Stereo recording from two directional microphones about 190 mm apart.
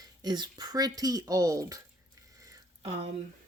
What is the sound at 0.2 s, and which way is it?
Speech, 20° right (ahead or behind).